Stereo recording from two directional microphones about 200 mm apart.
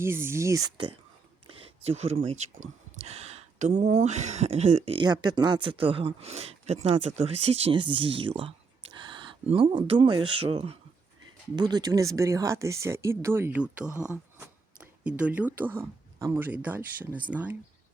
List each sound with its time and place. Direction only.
0.0 s speech: 10° right (ahead or behind)
1.5 s speech: 30° right (ahead or behind); by 13.8 s 5° right (ahead or behind)
13.9 s a sound: 10° right (ahead or behind)
15.5 s speech: 10° right (ahead or behind)